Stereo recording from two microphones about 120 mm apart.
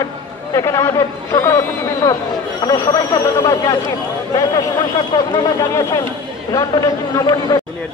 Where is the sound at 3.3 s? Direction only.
25° left (ahead or behind).